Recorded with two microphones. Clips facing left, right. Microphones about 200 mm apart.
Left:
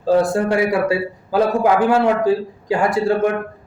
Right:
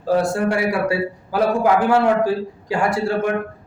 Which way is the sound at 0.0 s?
20° left (ahead or behind).